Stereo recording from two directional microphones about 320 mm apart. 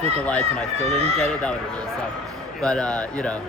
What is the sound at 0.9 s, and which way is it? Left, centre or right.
Speech, centre.